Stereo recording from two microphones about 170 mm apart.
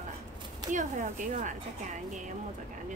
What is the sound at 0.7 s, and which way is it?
Speech, 45° right (ahead or behind).